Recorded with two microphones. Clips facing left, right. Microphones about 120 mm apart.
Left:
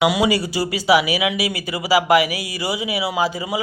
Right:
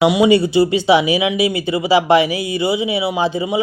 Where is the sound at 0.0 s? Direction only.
25° right (ahead or behind).